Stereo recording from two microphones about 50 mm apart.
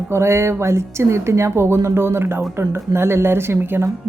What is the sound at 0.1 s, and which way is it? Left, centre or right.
A woman's voice, right.